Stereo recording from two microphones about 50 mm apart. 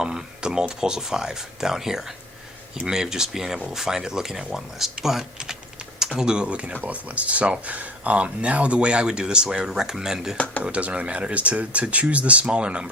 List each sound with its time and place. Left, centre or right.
0.0 s a sound: centre
0.8 s speech: centre
10.3 s speech: left
10.6 s speech: right